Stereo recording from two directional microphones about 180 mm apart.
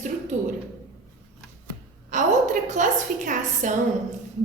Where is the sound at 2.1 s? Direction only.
45° right (ahead or behind).